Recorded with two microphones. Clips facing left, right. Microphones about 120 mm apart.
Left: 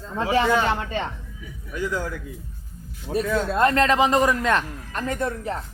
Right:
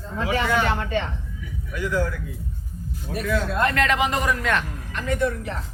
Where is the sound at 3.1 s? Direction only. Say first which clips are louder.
Left 2 dB; 30° left (ahead or behind).